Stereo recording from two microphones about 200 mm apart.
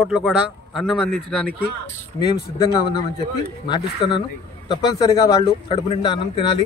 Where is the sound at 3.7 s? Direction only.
25° left (ahead or behind).